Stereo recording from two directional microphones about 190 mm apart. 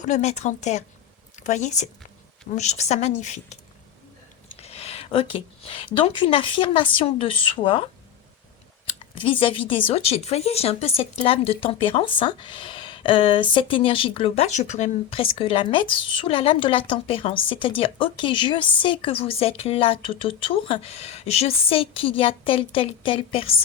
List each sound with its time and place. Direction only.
0.0 s speech: 40° left (ahead or behind)
4.6 s a sound: 35° left (ahead or behind)
5.6 s speech: 25° left (ahead or behind)
9.1 s speech: 30° left (ahead or behind)